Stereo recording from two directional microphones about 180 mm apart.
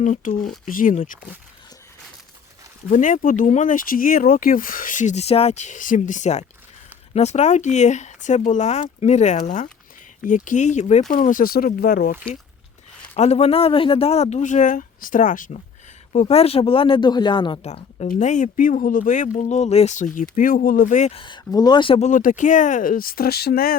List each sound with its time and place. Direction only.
0.0 s speech: 45° left (ahead or behind)
2.9 s speech: 45° left (ahead or behind)
13.1 s speech: 35° left (ahead or behind)
16.1 s speech: 35° left (ahead or behind)
17.7 s speech: 35° left (ahead or behind); by 23.7 s 60° left (ahead or behind)